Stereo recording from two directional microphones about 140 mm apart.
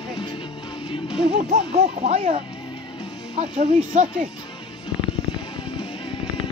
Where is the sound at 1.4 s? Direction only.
55° right (ahead or behind).